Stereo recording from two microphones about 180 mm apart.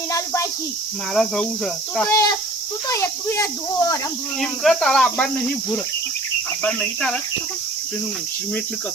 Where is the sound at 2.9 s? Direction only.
15° left (ahead or behind).